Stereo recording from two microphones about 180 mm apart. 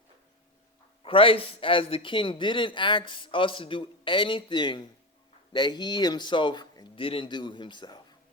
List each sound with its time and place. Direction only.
1.0 s speech: 30° left (ahead or behind)